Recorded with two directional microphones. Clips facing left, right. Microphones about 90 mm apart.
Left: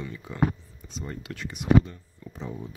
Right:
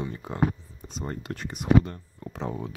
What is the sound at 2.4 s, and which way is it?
Speech, 80° right.